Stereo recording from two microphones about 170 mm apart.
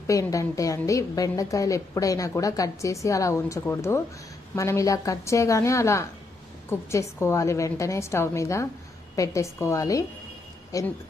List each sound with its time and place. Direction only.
0.1 s a woman's voice: 20° left (ahead or behind)